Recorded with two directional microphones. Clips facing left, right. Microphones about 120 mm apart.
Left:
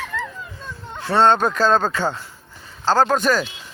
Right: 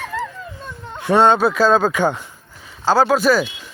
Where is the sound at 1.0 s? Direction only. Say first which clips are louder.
Right 2 dB; 15° right (ahead or behind).